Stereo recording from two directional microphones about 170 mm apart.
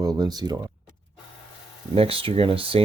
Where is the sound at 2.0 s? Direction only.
35° right (ahead or behind).